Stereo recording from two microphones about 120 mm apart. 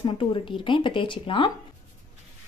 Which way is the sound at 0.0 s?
45° left (ahead or behind).